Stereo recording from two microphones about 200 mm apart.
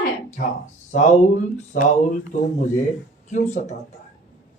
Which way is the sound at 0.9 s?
35° left (ahead or behind).